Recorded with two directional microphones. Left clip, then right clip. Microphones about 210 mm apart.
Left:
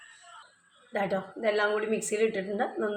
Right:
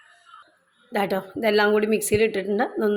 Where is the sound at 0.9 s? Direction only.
50° right (ahead or behind).